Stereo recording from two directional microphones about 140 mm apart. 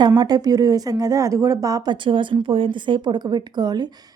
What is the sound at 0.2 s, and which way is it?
Speech, 30° right (ahead or behind).